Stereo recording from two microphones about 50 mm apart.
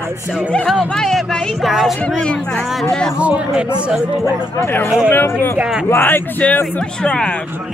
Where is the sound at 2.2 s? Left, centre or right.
Left.